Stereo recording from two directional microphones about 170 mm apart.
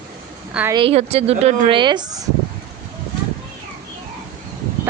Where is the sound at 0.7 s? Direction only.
35° right (ahead or behind).